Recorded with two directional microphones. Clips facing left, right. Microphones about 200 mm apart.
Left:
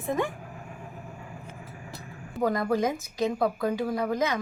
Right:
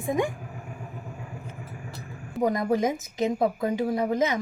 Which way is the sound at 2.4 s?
20° right (ahead or behind).